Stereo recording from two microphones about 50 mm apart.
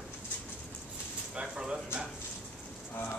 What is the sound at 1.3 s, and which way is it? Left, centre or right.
Speech, centre.